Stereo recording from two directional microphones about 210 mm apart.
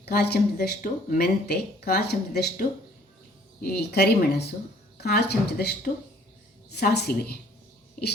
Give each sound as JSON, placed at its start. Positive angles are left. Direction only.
{"t": 0.0, "sound": "speech", "side_deg": 50}